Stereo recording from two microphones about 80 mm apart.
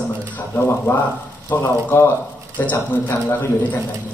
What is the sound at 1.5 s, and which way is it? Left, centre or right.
Speech, left.